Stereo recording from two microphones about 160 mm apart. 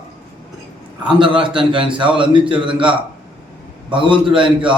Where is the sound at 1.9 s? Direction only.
30° right (ahead or behind).